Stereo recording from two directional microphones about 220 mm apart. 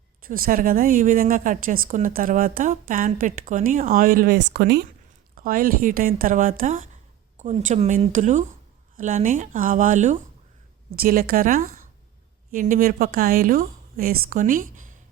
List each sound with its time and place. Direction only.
0.3 s a woman's voice: 40° right (ahead or behind)